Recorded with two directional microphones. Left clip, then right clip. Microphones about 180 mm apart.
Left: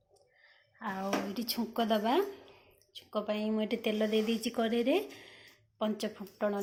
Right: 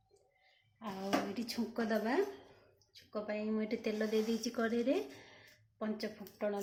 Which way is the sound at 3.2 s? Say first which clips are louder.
Left 4 dB; 10° right (ahead or behind).